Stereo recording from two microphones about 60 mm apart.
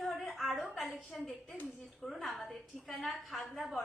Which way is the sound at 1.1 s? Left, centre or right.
Centre.